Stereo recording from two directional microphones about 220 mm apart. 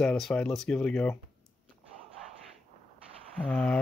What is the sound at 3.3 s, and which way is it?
Speech, 5° left (ahead or behind).